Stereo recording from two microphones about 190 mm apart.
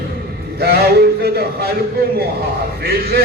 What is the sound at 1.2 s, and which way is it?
Speech, 55° right (ahead or behind).